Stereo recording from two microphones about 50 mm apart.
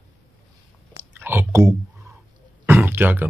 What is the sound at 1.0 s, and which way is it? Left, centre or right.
Chewing, right.